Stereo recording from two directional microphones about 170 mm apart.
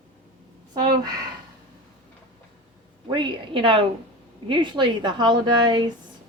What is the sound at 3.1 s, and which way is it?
A woman's voice, 30° right (ahead or behind).